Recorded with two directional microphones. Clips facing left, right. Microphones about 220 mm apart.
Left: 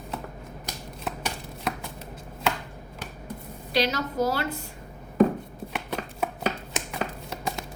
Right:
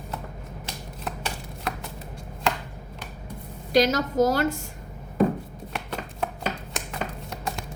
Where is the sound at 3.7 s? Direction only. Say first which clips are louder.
Right 5 dB; 45° right (ahead or behind).